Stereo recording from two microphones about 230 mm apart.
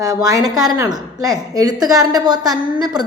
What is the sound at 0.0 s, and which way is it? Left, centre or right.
A woman's voice, centre.